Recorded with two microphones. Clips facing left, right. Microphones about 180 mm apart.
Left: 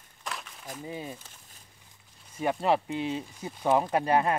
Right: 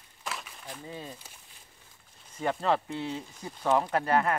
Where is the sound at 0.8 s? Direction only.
15° left (ahead or behind).